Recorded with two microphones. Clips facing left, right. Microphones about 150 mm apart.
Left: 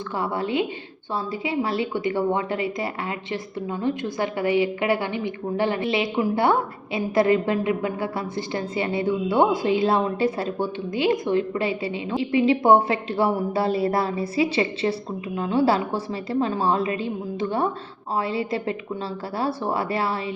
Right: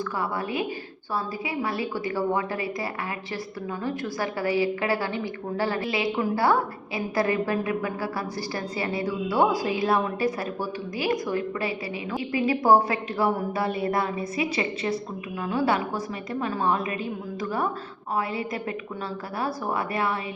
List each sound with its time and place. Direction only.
0.2 s a woman's voice: 25° left (ahead or behind)